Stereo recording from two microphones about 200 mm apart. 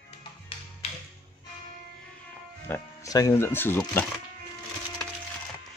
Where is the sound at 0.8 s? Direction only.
30° left (ahead or behind).